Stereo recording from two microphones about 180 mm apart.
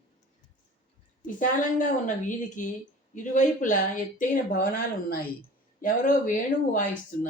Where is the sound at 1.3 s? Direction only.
45° left (ahead or behind).